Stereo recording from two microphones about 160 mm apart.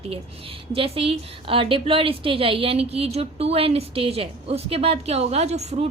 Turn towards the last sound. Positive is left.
turn(degrees=-45)  # may be behind; listen again after turning